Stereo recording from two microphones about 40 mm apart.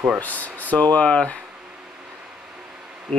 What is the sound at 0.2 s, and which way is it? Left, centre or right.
Speech, left.